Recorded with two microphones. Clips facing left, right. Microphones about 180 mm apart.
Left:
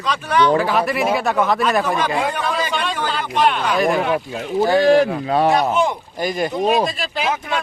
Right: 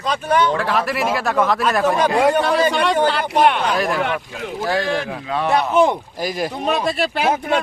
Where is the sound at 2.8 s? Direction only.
70° right (ahead or behind).